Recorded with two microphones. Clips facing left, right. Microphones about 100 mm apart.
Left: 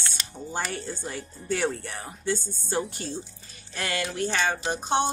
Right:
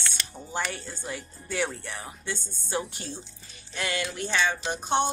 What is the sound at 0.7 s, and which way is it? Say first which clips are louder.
Speech: left 2 dB; 45° left (ahead or behind).